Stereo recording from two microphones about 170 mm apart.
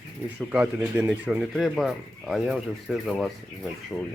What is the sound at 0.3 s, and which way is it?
Speech, 5° right (ahead or behind).